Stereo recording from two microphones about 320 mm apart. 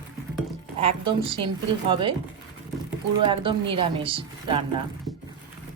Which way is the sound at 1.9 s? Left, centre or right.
Centre.